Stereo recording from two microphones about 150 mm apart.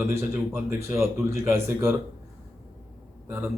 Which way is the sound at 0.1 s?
15° right (ahead or behind).